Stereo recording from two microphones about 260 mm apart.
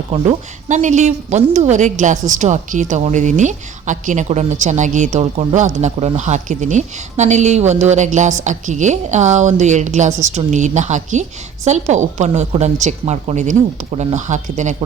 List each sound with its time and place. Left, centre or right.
0.1 s a woman's voice: right